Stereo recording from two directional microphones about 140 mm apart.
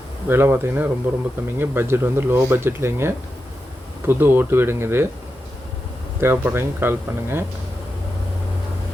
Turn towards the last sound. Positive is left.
turn(degrees=-15)  # may be behind; listen again after turning